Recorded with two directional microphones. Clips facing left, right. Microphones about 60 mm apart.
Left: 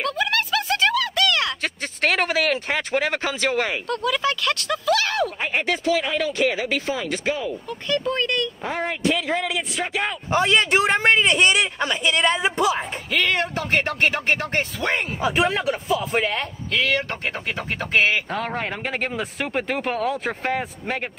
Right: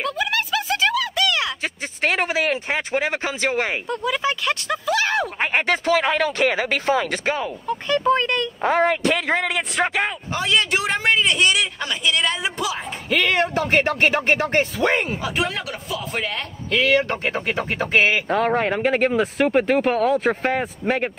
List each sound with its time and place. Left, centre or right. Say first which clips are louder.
0.0 s speech: even; centre
5.4 s speech: right 3 dB; right
7.6 s speech: right 8 dB; centre
8.6 s speech: right 8 dB; right
10.4 s a woman's voice: left 1 dB; left
13.1 s speech: right 3 dB; centre
15.1 s speech: left 3 dB; centre
16.7 s speech: right 4 dB; centre